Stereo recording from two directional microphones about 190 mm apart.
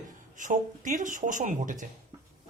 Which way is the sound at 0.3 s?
40° right (ahead or behind).